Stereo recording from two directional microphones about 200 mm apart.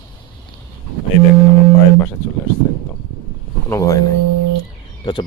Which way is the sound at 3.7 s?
15° left (ahead or behind).